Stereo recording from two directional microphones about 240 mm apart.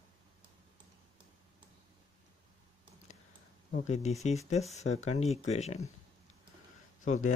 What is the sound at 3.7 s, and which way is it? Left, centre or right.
Speech, left.